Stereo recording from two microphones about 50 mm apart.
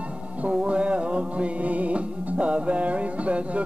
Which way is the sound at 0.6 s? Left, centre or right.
Right.